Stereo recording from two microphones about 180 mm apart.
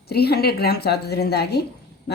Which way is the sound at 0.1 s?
60° left (ahead or behind).